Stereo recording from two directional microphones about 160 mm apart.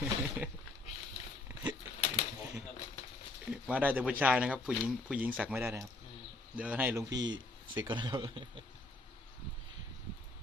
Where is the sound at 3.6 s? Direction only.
10° right (ahead or behind).